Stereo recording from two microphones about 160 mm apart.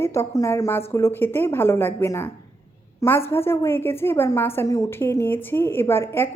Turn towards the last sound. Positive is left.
turn(degrees=15)  # may be behind; listen again after turning